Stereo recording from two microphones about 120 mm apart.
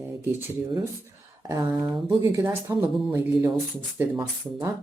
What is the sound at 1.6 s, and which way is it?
Speech, 35° right (ahead or behind).